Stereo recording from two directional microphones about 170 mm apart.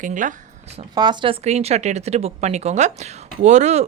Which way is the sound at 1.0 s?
25° right (ahead or behind).